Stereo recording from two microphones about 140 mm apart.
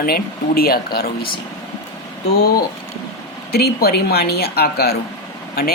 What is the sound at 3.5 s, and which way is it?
Speech, 90° left.